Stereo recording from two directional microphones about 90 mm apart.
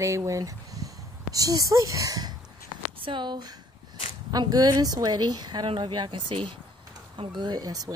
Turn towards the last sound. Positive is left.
turn(degrees=-45)  # may be behind; listen again after turning